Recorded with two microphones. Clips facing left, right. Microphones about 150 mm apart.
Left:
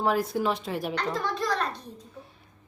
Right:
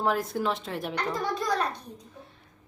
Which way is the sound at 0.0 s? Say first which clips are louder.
Left 2 dB; centre (ahead or behind).